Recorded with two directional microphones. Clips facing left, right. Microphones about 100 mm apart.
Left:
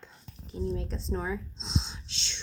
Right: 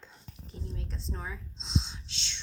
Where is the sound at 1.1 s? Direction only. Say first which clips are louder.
Left 9 dB; 65° left (ahead or behind).